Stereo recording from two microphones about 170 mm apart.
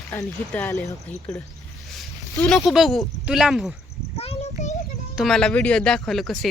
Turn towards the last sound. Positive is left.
turn(degrees=0)  # may be behind; listen again after turning